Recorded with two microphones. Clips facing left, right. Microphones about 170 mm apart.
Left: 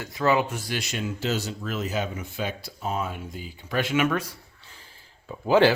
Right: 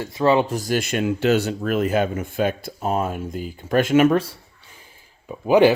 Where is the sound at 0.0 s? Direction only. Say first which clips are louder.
Right 5 dB; 25° right (ahead or behind).